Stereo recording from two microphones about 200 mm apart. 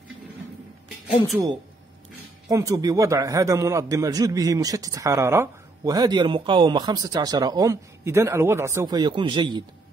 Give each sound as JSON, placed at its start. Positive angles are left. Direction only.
{"t": 2.4, "sound": "a man's voice", "side_deg": -15}